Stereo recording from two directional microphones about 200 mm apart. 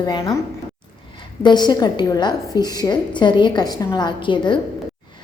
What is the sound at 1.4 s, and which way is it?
A woman's voice, 20° left (ahead or behind).